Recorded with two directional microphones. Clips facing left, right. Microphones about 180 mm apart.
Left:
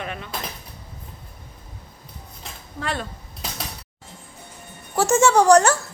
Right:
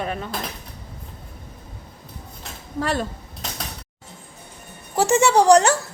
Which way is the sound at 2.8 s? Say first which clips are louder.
Right 5 dB; 40° right (ahead or behind).